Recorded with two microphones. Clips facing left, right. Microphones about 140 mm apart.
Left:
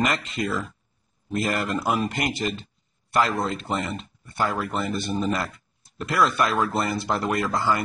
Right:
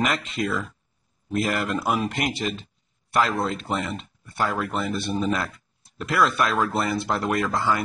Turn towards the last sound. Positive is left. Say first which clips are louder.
# even
turn(degrees=0)  # may be behind; listen again after turning